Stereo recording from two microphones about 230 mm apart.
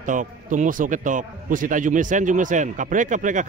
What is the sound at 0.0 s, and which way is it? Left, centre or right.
A man's voice, right.